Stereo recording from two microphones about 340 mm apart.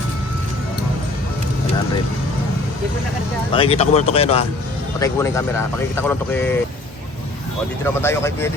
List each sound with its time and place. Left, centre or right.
3.5 s speech: centre
8.0 s speech: centre